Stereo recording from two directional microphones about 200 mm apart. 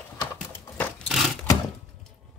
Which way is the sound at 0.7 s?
Centre (ahead or behind).